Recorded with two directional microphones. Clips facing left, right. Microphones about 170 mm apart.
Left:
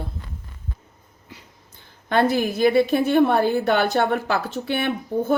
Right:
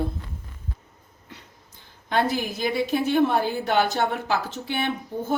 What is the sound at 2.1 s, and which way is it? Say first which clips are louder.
A woman's voice: left 5 dB; 55° left (ahead or behind).